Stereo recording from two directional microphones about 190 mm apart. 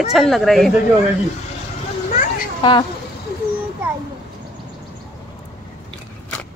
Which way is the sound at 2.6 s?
25° left (ahead or behind).